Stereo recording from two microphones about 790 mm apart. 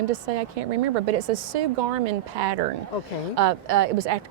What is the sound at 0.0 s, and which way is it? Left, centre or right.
A woman's voice, right.